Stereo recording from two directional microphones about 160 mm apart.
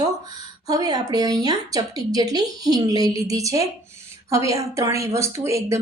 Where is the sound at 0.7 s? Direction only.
25° right (ahead or behind).